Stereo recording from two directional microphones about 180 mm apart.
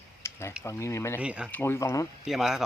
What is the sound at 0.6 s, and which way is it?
Speech, 15° left (ahead or behind).